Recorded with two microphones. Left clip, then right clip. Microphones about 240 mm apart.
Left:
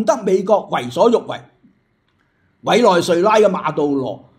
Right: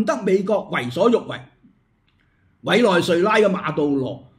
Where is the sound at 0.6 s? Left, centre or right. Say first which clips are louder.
Left 4 dB; right.